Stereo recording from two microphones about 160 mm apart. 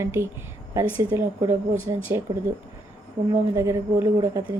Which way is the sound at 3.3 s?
20° right (ahead or behind).